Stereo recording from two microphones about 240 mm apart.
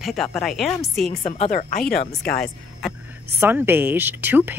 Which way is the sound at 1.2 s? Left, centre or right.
Left.